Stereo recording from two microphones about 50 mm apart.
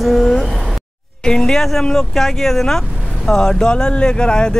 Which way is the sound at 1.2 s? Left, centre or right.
Centre.